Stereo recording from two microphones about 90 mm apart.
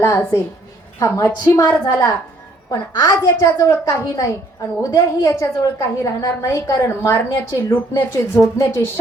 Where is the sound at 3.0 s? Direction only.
45° left (ahead or behind).